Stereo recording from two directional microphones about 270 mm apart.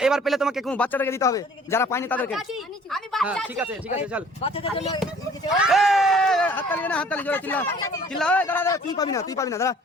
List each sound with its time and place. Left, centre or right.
0.0 s speech: centre
4.4 s speech: left
5.5 s speech: centre